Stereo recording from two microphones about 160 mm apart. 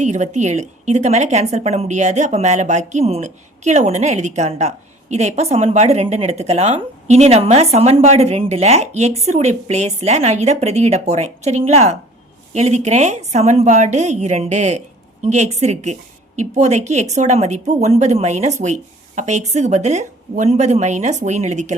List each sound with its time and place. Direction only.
0.0 s a woman's voice: 45° right (ahead or behind)